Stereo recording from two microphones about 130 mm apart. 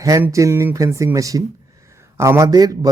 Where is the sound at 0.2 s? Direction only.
25° right (ahead or behind).